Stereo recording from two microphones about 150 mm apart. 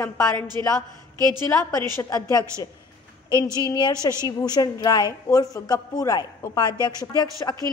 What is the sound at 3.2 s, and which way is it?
Speech, 20° right (ahead or behind).